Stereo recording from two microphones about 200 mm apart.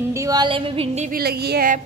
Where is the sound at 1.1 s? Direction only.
50° right (ahead or behind).